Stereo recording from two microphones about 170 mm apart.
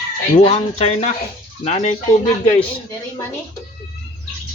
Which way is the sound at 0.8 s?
35° left (ahead or behind).